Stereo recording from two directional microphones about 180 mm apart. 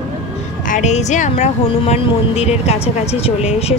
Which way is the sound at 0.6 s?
45° left (ahead or behind).